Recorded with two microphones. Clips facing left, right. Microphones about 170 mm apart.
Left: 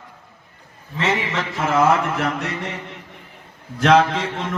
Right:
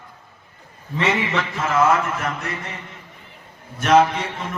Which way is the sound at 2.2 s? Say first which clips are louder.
Left 4 dB; 75° left (ahead or behind).